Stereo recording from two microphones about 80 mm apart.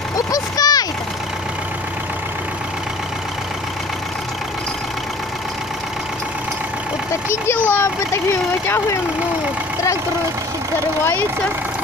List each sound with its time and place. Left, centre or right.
0.3 s vehicle: left
7.2 s a child's voice: left